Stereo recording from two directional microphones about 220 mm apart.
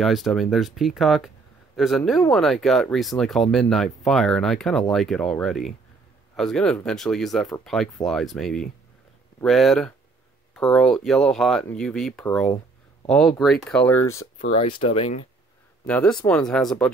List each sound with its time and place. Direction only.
0.0 s speech: centre (ahead or behind)
14.4 s speech: 30° left (ahead or behind)
15.9 s speech: 5° left (ahead or behind)